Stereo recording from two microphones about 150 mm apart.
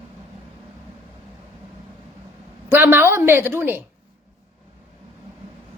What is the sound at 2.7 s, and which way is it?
A woman's voice, 15° right (ahead or behind).